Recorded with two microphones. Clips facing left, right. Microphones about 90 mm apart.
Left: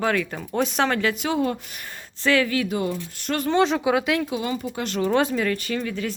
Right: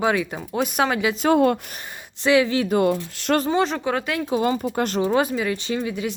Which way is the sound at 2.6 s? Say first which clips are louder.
Right 6 dB; 60° right (ahead or behind).